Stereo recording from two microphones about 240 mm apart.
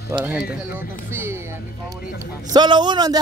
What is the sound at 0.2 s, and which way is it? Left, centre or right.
A man's voice, centre.